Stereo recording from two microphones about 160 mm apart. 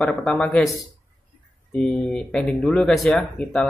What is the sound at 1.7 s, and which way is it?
Speech, 5° left (ahead or behind).